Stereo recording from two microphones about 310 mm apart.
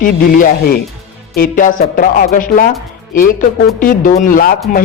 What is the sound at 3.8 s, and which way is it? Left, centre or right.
Speech, left.